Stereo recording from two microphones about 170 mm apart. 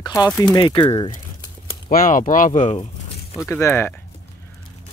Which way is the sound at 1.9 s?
50° left (ahead or behind).